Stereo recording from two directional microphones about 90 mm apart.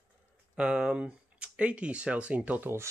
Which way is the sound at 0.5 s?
10° right (ahead or behind).